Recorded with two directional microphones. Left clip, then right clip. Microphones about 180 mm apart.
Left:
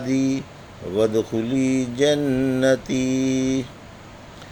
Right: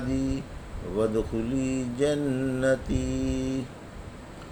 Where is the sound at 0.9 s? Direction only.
30° left (ahead or behind).